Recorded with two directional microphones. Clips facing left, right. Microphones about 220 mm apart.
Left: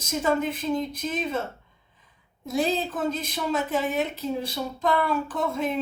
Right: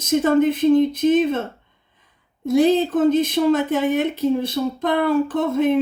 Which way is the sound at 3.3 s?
55° right (ahead or behind).